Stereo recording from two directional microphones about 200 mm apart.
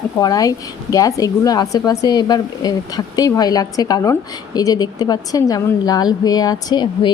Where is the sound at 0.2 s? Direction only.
20° left (ahead or behind).